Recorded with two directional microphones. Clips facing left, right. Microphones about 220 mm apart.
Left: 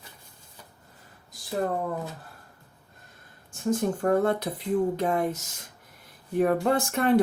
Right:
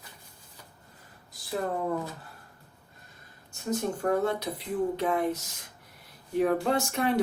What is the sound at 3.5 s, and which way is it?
Speech, 50° left (ahead or behind).